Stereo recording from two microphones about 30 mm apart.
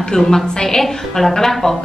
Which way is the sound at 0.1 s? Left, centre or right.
Centre.